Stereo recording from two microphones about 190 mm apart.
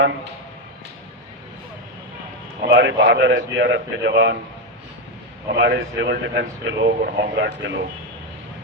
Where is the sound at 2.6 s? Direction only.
65° right (ahead or behind).